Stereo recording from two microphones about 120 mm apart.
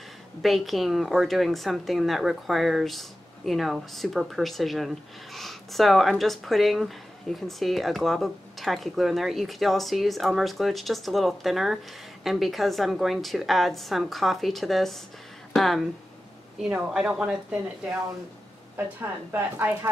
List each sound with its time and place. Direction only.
0.4 s a woman's voice: centre (ahead or behind); by 19.9 s 15° right (ahead or behind)